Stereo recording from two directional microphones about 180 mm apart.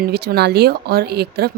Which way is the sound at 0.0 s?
60° right (ahead or behind).